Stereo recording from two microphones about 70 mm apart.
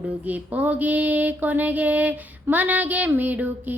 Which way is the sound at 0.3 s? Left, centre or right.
Right.